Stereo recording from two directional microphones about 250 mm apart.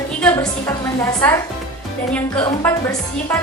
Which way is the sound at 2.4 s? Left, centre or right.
Centre.